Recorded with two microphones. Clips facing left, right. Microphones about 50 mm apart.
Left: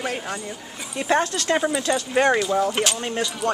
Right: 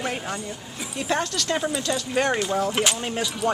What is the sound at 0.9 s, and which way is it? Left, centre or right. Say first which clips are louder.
Speech: left 4 dB; left.